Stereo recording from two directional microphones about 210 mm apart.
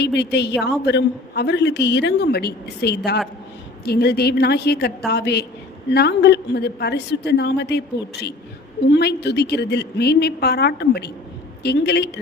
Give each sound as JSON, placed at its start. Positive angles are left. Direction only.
{"t": 0.0, "sound": "a woman's voice", "side_deg": 50}